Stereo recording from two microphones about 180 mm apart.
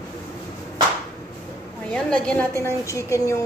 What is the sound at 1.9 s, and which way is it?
Speech, 5° left (ahead or behind).